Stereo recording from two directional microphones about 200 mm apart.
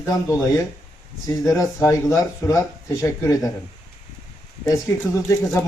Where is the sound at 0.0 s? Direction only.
15° left (ahead or behind).